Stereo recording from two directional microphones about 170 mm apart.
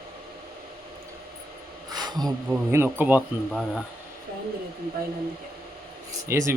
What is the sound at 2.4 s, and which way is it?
Speech, 15° right (ahead or behind).